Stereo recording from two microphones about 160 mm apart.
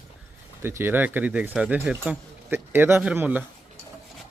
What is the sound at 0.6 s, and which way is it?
A man's voice, 15° right (ahead or behind).